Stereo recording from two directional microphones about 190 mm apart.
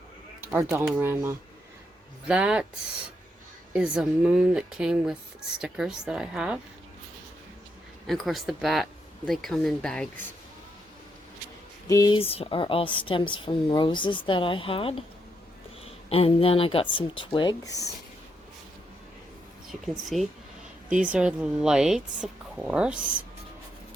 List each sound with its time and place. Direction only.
0.4 s speech: 10° right (ahead or behind)
3.7 s speech: 5° right (ahead or behind)
8.0 s speech: centre (ahead or behind)
11.9 s a woman's voice: 20° left (ahead or behind)
16.0 s a woman's voice: 30° left (ahead or behind)
19.6 s speech: centre (ahead or behind)